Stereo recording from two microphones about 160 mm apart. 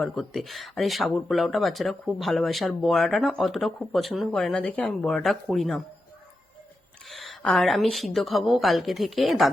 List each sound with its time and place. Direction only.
0.0 s speech: centre (ahead or behind)
7.1 s speech: centre (ahead or behind)